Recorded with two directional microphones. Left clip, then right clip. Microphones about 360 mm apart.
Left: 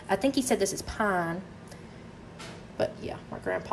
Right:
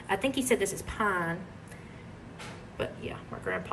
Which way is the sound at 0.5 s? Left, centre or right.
Left.